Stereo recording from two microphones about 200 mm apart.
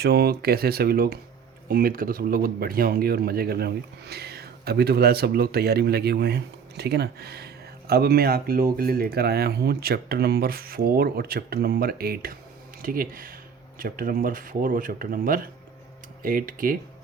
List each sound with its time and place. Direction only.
0.0 s speech: 55° right (ahead or behind)